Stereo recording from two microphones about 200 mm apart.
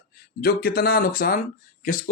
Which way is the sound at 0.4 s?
45° left (ahead or behind).